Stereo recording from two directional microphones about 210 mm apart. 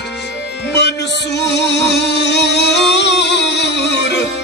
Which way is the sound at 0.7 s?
55° left (ahead or behind).